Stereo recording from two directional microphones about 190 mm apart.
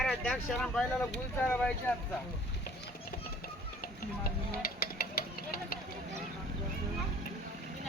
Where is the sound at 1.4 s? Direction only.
10° left (ahead or behind).